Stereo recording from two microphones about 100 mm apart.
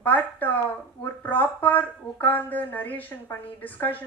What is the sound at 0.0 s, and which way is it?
A woman's voice, 15° left (ahead or behind).